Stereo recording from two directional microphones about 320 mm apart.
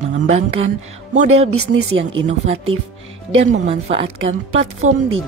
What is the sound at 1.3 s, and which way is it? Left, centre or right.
Speech, right.